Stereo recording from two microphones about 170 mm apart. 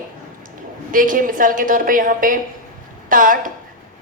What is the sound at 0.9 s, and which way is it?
A woman's voice, 50° right (ahead or behind).